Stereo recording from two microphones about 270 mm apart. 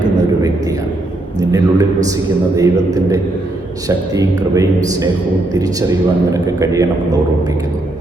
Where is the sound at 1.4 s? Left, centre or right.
Centre.